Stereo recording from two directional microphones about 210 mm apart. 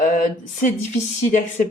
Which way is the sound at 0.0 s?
40° left (ahead or behind).